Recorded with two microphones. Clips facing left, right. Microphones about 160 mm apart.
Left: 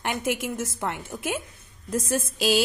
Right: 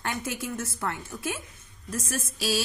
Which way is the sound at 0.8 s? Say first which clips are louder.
Left 2 dB; 20° left (ahead or behind).